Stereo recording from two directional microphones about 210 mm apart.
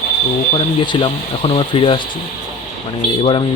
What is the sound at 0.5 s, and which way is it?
Speech, 20° left (ahead or behind).